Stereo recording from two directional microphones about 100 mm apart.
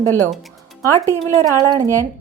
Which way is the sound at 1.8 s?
30° right (ahead or behind).